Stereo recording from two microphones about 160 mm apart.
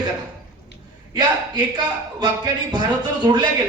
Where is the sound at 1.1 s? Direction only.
25° right (ahead or behind).